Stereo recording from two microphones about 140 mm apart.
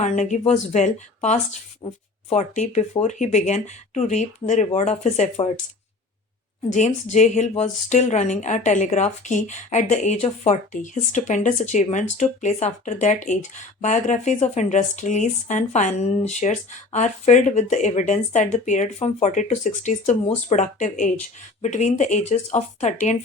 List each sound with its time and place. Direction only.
0.0 s speech: 55° left (ahead or behind)
6.7 s speech: 60° left (ahead or behind)